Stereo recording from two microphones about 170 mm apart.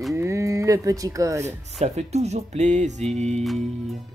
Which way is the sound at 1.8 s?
40° right (ahead or behind).